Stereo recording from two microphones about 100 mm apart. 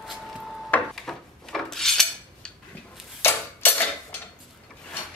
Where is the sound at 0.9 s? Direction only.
5° left (ahead or behind).